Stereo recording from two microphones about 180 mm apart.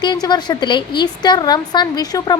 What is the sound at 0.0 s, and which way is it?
Speech, 25° left (ahead or behind).